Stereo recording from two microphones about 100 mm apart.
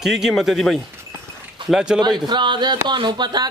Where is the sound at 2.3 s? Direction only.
50° right (ahead or behind).